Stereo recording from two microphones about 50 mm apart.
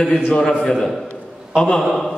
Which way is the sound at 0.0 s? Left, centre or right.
Centre.